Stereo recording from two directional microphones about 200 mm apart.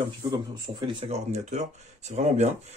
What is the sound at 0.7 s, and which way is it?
Speech, 25° right (ahead or behind).